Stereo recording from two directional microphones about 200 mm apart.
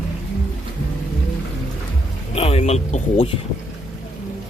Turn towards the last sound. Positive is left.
turn(degrees=35)  # may be behind; listen again after turning